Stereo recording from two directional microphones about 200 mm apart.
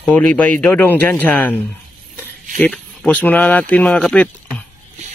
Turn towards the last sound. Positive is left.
turn(degrees=5)  # may be behind; listen again after turning